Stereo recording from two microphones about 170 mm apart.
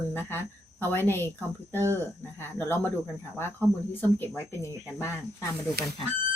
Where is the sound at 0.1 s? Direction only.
15° left (ahead or behind).